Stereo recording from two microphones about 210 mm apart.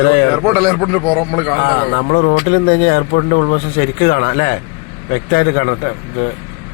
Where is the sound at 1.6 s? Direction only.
45° left (ahead or behind).